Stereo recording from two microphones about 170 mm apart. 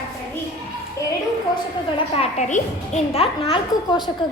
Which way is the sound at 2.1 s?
40° left (ahead or behind).